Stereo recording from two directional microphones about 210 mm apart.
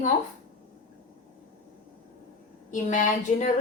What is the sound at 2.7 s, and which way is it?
Speech, 35° left (ahead or behind).